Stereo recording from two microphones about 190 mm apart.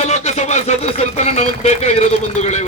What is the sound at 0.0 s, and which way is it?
Speech, 35° left (ahead or behind).